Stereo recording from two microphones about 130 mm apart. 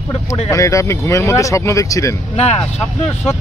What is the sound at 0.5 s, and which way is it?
Speech, 25° left (ahead or behind).